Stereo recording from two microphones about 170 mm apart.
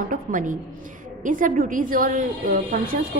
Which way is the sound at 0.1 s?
50° right (ahead or behind).